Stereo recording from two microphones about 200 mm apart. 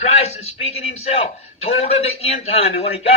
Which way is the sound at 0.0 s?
30° left (ahead or behind).